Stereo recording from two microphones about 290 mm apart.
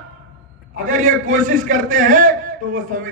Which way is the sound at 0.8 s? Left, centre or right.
Right.